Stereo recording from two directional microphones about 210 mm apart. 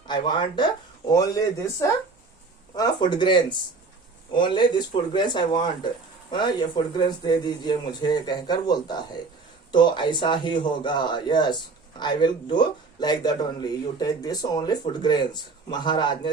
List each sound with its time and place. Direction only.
0.1 s speech: 20° left (ahead or behind)